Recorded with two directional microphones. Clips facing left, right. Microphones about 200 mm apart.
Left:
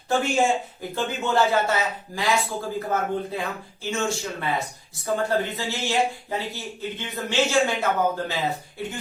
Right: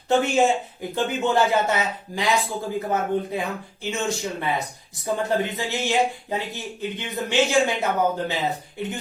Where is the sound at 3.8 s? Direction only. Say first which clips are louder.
Even; 20° right (ahead or behind).